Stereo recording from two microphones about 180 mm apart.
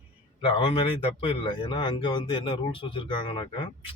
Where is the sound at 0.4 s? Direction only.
30° left (ahead or behind).